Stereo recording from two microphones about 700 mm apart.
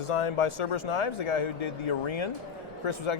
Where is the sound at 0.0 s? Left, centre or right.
Left.